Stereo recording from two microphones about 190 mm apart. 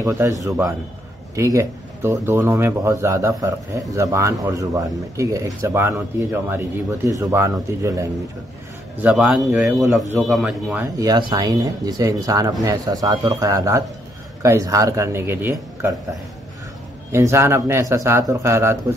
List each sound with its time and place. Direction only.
0.0 s a man's voice: 15° right (ahead or behind)
11.0 s speech: 20° right (ahead or behind)